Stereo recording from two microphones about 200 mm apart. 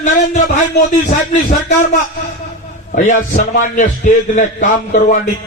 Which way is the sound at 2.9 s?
40° left (ahead or behind).